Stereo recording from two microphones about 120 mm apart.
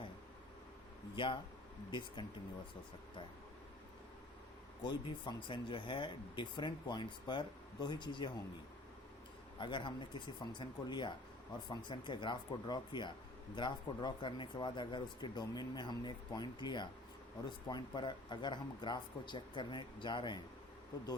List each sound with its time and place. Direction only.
1.1 s speech: 40° left (ahead or behind)
4.8 s speech: 40° left (ahead or behind)
9.6 s speech: 40° left (ahead or behind)